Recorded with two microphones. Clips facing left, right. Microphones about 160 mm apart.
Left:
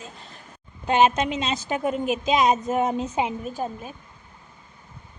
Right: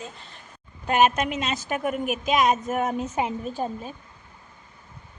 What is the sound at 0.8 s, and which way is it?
A woman's voice, 25° left (ahead or behind).